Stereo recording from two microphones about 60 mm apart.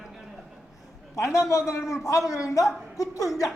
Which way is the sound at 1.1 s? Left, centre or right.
Left.